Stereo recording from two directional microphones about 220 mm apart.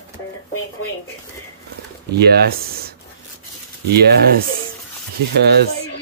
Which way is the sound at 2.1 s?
45° right (ahead or behind).